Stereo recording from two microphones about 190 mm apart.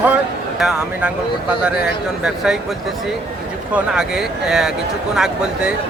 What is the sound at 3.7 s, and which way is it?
Speech, 5° right (ahead or behind).